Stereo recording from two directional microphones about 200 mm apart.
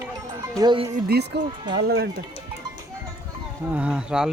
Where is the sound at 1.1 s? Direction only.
55° right (ahead or behind).